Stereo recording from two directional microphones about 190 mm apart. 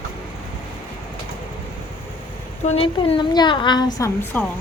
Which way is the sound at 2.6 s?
30° left (ahead or behind).